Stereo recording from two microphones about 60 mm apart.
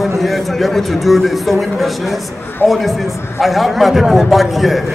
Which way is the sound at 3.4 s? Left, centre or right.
Centre.